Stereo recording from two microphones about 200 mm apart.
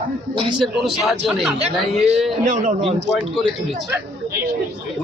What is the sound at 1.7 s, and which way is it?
A man's voice, 30° right (ahead or behind).